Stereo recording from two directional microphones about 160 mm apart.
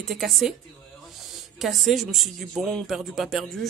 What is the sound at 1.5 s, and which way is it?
Speech, centre (ahead or behind).